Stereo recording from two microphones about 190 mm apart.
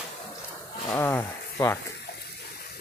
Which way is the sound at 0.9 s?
10° left (ahead or behind).